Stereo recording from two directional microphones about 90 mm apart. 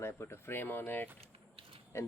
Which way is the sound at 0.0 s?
30° left (ahead or behind).